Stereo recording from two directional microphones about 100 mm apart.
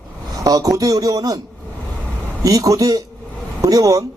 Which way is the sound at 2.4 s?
35° right (ahead or behind).